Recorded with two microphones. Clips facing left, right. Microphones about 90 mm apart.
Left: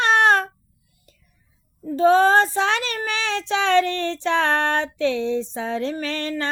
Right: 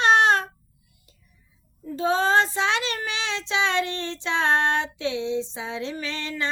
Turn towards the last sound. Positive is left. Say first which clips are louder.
# left 4 dB
turn(degrees=50)  # may be behind; listen again after turning